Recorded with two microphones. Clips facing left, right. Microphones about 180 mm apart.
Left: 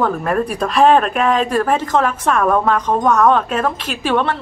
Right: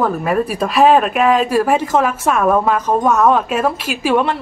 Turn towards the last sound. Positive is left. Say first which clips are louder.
# right 2 dB
turn(degrees=-10)  # may be behind; listen again after turning